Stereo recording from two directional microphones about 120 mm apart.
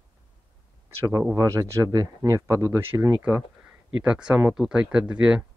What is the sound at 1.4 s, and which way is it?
Speech, 30° right (ahead or behind).